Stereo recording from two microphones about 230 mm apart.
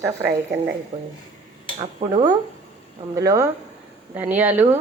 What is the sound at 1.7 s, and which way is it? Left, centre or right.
Speech, centre.